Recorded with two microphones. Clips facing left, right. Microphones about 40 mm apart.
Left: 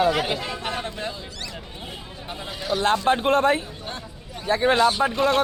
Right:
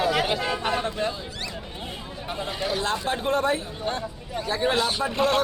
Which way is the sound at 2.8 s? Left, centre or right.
Left.